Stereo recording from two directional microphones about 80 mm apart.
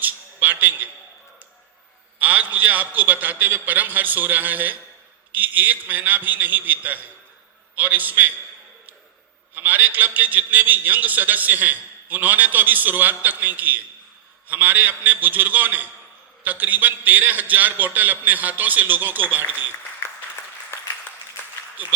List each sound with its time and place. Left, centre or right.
0.0 s a sound: right
2.2 s a man's voice: right
9.6 s a man's voice: right
20.7 s applause: left